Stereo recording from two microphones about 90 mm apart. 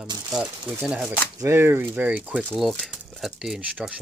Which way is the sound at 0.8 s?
5° right (ahead or behind).